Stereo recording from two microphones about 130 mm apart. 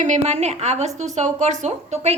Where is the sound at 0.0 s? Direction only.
65° right (ahead or behind).